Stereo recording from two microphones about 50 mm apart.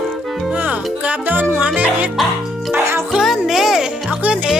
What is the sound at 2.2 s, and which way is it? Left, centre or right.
Music, centre.